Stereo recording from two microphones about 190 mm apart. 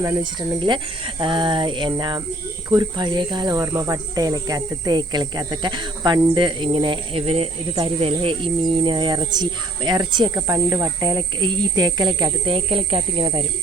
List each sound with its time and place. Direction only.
0.0 s speech: 20° right (ahead or behind)